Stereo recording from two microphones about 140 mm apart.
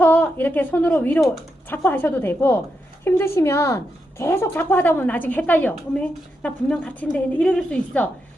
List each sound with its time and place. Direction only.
0.0 s a woman's voice: 10° left (ahead or behind)